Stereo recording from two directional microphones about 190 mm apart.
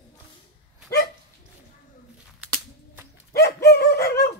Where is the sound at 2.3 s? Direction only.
5° right (ahead or behind).